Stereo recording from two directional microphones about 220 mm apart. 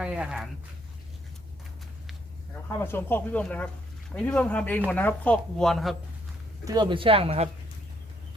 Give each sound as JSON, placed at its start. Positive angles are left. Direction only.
{"t": 0.0, "sound": "a sound", "side_deg": -5}
{"t": 2.6, "sound": "speech", "side_deg": 10}
{"t": 6.7, "sound": "speech", "side_deg": -20}